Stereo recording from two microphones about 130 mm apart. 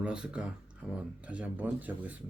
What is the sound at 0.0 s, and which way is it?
Speech, 10° right (ahead or behind).